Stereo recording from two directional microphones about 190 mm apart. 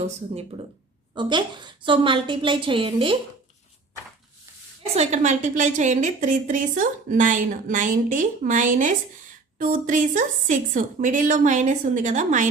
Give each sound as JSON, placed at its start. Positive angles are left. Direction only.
{"t": 0.0, "sound": "a woman's voice", "side_deg": -35}
{"t": 1.1, "sound": "a woman's voice", "side_deg": -25}
{"t": 4.9, "sound": "a woman's voice", "side_deg": -40}